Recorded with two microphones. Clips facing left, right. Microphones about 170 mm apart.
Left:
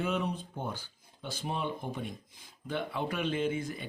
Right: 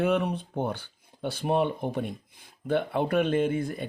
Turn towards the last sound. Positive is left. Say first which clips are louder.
# right 6 dB
turn(degrees=-50)  # may be behind; listen again after turning